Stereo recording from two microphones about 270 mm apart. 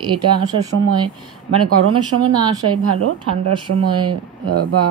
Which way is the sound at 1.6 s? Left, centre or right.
Right.